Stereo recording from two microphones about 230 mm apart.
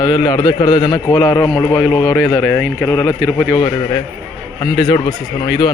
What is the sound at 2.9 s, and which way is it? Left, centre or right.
A man's voice, centre.